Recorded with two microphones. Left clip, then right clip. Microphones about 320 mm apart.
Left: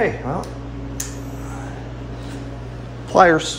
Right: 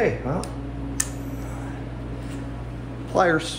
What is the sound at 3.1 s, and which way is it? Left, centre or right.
Speech, left.